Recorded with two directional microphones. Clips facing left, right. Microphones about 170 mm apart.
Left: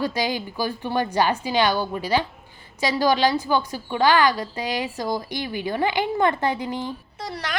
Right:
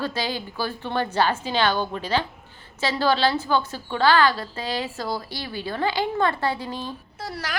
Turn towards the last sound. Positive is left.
turn(degrees=-5)  # may be behind; listen again after turning